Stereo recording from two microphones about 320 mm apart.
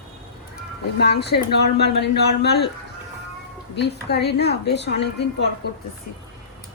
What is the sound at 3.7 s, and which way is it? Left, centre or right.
A man's voice, left.